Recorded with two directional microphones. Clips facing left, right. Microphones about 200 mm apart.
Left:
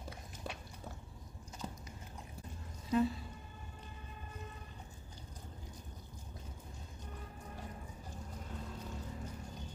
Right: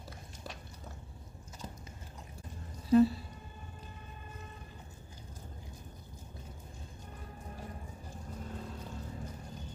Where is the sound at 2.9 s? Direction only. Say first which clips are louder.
Right 8 dB; 35° right (ahead or behind).